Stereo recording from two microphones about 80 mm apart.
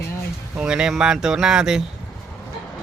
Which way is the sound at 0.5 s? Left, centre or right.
Centre.